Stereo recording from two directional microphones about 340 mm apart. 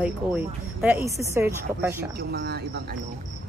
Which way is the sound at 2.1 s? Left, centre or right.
Right.